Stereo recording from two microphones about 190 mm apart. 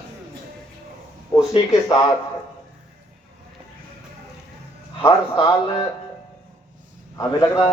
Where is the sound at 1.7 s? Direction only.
20° left (ahead or behind).